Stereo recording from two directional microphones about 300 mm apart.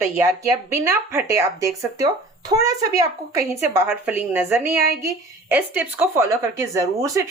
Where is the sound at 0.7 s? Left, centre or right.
Centre.